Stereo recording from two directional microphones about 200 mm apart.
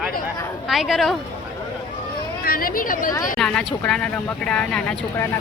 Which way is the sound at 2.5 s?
45° left (ahead or behind).